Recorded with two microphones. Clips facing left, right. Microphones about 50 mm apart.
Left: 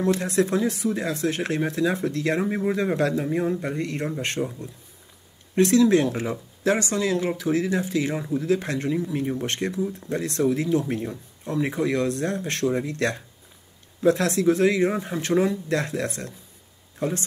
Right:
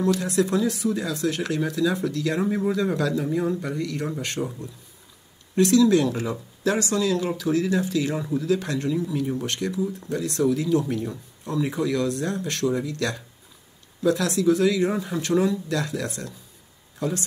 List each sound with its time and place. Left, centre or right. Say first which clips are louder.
0.0 s speech: even; left
4.4 s speech: left 1 dB; centre
5.6 s speech: even; left
8.1 s speech: even; left
8.4 s speech: left 1 dB; left